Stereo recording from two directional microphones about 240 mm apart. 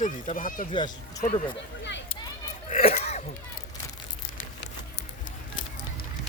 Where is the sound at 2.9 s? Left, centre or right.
Left.